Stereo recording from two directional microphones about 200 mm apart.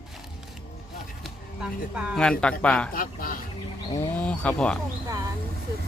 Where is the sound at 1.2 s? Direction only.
5° right (ahead or behind).